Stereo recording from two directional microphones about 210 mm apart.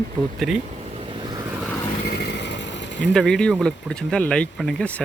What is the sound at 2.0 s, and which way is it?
Vehicle, 50° left (ahead or behind).